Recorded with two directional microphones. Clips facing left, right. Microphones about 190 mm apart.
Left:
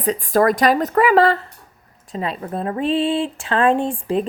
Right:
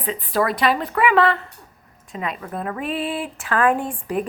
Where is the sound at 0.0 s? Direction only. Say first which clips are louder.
Left 6 dB; 45° left (ahead or behind).